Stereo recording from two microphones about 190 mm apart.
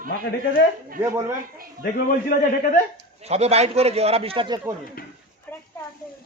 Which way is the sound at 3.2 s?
35° right (ahead or behind).